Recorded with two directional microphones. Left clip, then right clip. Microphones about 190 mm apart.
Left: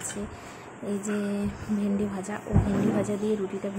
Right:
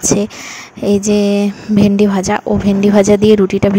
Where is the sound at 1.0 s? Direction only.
50° right (ahead or behind).